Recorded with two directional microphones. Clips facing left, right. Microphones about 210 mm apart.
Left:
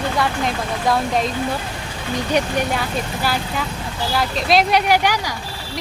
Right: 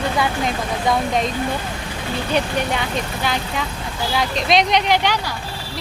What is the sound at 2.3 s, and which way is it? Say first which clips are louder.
Speech: left 1 dB; 5° left (ahead or behind).